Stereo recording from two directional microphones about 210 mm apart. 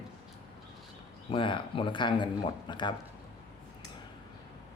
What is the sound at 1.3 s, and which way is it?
Speech, 25° left (ahead or behind).